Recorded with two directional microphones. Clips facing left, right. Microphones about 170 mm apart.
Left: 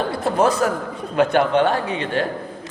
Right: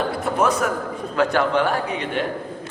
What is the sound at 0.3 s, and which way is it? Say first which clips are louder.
Speech: left 3 dB; 30° left (ahead or behind).